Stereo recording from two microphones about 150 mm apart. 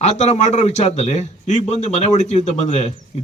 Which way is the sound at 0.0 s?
50° left (ahead or behind).